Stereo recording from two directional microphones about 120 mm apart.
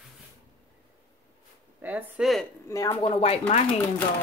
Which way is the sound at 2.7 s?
25° left (ahead or behind).